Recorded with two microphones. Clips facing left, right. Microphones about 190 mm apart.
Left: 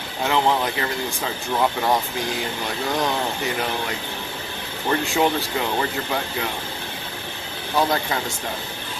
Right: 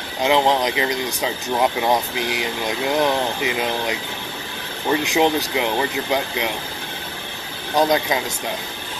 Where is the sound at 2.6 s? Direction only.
10° right (ahead or behind).